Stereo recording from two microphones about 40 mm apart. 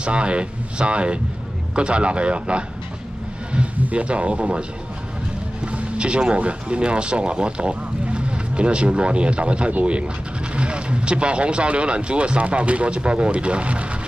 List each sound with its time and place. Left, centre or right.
0.0 s speech: right
3.8 s speech: right
5.7 s speech: right